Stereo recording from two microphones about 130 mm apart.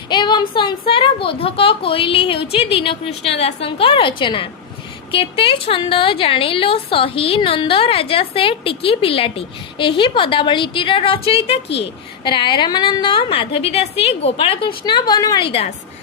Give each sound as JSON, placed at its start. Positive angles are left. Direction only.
{"t": 0.1, "sound": "a woman's voice", "side_deg": 35}
{"t": 12.2, "sound": "a woman's voice", "side_deg": 35}
{"t": 15.4, "sound": "a woman's voice", "side_deg": 40}